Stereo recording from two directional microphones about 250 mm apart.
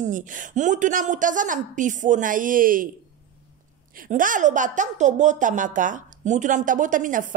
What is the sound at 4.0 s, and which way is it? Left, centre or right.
A woman's voice, right.